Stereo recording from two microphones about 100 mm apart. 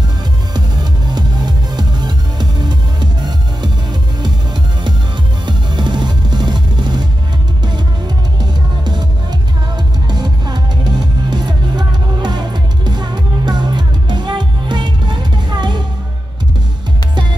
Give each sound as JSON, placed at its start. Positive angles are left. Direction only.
{"t": 0.6, "sound": "music", "side_deg": -45}
{"t": 5.5, "sound": "music", "side_deg": -50}
{"t": 8.4, "sound": "music", "side_deg": -45}